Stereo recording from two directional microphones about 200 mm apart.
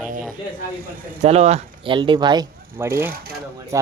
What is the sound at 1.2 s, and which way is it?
Speech, 30° right (ahead or behind).